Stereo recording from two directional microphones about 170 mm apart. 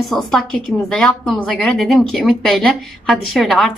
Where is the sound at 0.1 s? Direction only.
Centre (ahead or behind).